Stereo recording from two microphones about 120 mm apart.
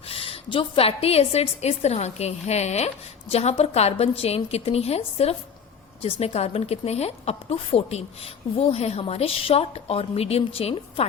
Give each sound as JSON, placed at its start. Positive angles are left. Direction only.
{"t": 0.1, "sound": "a woman's voice", "side_deg": 50}